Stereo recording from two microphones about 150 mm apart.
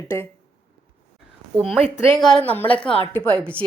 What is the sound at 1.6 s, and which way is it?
Speech, centre (ahead or behind).